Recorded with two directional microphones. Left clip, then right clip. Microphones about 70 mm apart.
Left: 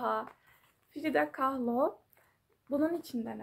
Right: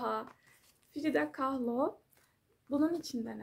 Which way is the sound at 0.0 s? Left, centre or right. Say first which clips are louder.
Left 3 dB; right.